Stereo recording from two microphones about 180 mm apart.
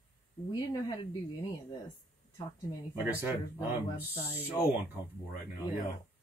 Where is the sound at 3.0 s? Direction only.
10° right (ahead or behind).